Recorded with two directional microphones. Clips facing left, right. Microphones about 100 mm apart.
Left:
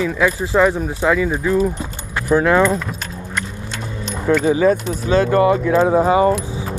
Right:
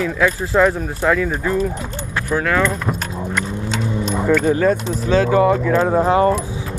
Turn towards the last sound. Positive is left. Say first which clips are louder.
# left 1 dB
turn(degrees=5)  # may be behind; listen again after turning